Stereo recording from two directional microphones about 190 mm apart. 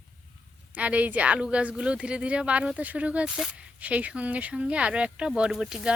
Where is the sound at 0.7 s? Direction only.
5° right (ahead or behind).